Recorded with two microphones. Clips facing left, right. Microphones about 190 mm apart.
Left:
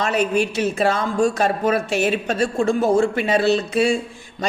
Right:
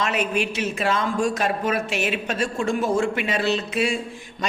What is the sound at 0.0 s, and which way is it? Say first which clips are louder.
Speech: left 4 dB; 35° left (ahead or behind).